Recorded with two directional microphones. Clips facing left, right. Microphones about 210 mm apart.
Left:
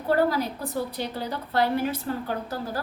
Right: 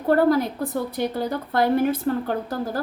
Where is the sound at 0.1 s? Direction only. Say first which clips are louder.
Right 5 dB; 50° right (ahead or behind).